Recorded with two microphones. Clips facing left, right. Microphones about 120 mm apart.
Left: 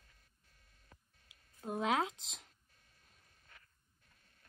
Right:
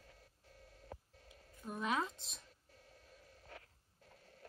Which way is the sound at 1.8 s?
90° left.